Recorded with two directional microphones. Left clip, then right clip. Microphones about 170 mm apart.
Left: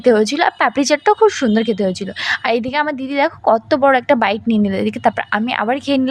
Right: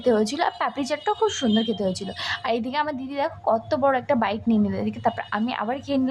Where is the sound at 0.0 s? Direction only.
30° left (ahead or behind).